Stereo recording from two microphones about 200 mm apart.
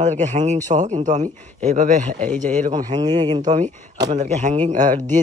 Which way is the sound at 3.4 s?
35° right (ahead or behind).